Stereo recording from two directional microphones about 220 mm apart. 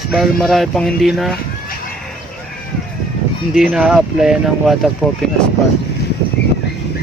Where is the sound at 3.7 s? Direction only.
5° right (ahead or behind).